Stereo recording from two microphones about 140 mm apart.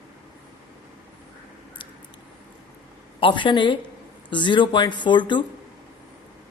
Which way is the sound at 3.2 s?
35° left (ahead or behind).